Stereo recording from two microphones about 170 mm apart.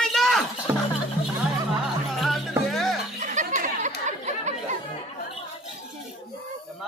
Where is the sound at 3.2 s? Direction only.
45° right (ahead or behind).